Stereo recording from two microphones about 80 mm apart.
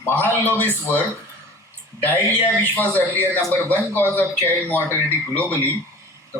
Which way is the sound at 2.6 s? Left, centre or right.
Left.